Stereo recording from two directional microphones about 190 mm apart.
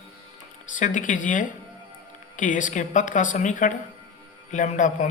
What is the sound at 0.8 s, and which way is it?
Speech, 40° left (ahead or behind).